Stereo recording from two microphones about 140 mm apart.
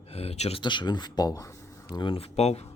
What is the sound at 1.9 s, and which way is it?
Speech, 40° left (ahead or behind).